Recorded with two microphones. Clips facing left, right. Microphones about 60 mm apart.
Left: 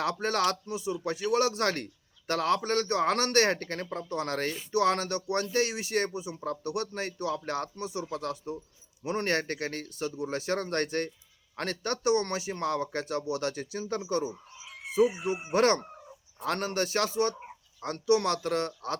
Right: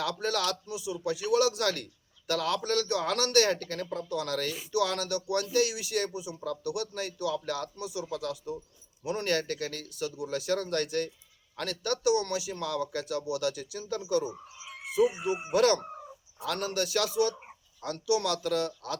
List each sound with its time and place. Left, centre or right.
0.0 s speech: left
15.0 s speech: centre
15.5 s speech: left
15.8 s fowl: centre
16.4 s speech: left